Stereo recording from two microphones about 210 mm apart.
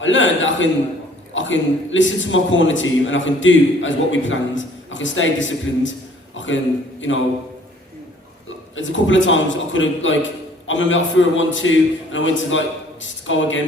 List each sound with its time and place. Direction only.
0.0 s a man's voice: 65° left (ahead or behind)
8.4 s a man's voice: 65° left (ahead or behind)